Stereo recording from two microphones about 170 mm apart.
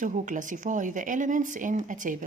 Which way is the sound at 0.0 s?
50° right (ahead or behind).